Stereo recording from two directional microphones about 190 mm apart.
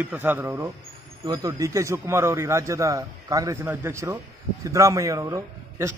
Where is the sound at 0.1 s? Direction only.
10° right (ahead or behind).